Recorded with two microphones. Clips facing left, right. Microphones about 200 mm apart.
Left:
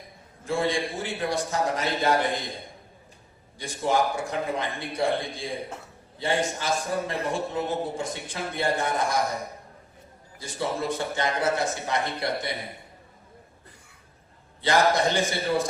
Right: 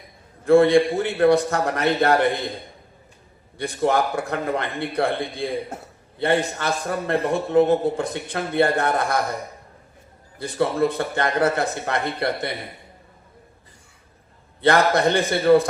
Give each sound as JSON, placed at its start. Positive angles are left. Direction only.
{"t": 0.4, "sound": "a man's voice", "side_deg": -60}
{"t": 3.6, "sound": "a man's voice", "side_deg": -60}
{"t": 10.3, "sound": "a man's voice", "side_deg": -60}
{"t": 14.6, "sound": "a man's voice", "side_deg": -60}